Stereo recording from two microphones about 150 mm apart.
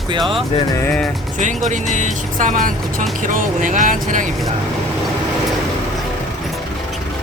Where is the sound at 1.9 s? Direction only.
55° right (ahead or behind).